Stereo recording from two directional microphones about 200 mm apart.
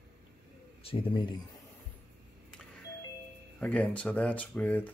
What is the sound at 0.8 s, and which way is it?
Speech, 25° left (ahead or behind).